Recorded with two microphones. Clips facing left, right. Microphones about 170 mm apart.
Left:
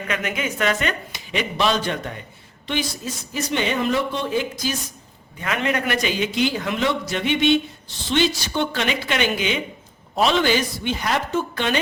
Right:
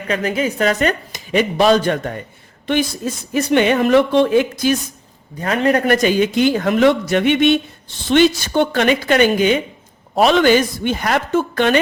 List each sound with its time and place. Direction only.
0.1 s a man's voice: 35° right (ahead or behind); by 4.8 s 60° right (ahead or behind)
5.4 s a man's voice: 35° right (ahead or behind); by 11.8 s 55° right (ahead or behind)